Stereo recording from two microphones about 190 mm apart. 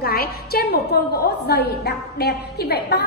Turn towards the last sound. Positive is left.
turn(degrees=60)  # may be behind; listen again after turning